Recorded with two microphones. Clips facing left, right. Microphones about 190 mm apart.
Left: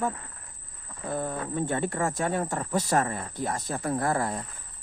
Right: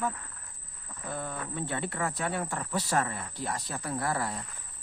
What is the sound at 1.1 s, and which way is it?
Speech, 45° left (ahead or behind).